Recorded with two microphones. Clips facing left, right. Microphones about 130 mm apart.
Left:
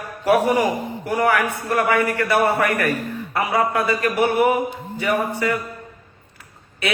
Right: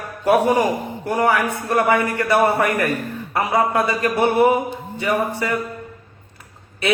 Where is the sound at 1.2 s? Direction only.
20° right (ahead or behind).